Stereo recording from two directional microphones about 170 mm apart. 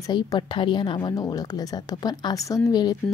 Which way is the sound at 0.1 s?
25° left (ahead or behind).